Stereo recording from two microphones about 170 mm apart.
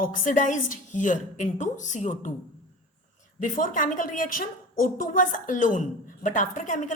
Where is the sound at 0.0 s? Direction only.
50° left (ahead or behind).